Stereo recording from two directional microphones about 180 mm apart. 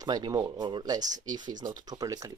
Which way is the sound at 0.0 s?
20° right (ahead or behind).